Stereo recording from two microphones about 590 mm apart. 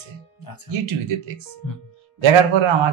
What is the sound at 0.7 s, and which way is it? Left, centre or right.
Speech, right.